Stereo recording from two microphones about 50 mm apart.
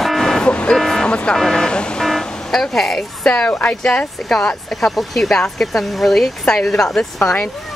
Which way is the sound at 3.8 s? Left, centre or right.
Centre.